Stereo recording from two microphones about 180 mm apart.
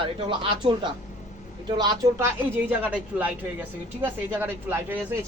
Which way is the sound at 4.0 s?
10° right (ahead or behind).